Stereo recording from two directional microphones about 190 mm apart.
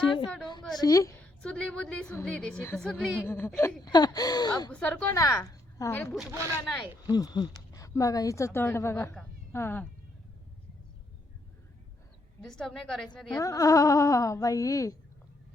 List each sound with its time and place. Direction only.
0.8 s a woman's voice: 15° left (ahead or behind)
1.4 s speech: 5° left (ahead or behind)
4.7 s a woman's voice: 5° left (ahead or behind)
6.3 s speech: 15° right (ahead or behind)
7.1 s a woman's voice: 20° left (ahead or behind)
12.4 s speech: centre (ahead or behind)
13.3 s a woman's voice: 15° left (ahead or behind)